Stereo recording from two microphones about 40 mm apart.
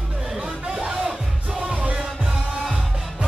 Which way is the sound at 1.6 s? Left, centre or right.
Right.